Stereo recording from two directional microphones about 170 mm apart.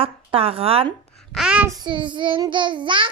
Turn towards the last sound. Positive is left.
turn(degrees=-30)  # may be behind; listen again after turning